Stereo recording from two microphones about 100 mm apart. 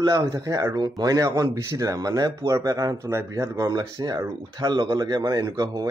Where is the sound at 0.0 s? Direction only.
40° right (ahead or behind).